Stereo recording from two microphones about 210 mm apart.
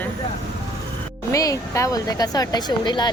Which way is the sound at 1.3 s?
15° left (ahead or behind).